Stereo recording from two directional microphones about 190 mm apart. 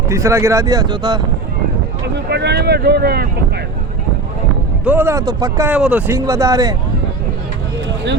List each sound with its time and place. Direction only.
0.1 s speech: 15° right (ahead or behind)
2.1 s speech: 60° right (ahead or behind)
4.9 s speech: 10° right (ahead or behind)